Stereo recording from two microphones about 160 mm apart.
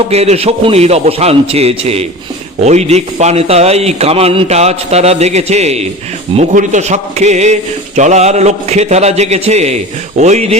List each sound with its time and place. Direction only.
0.1 s a man's voice: 40° right (ahead or behind)